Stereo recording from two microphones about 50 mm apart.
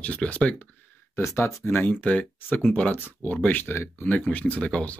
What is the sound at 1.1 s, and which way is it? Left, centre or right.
Speech, left.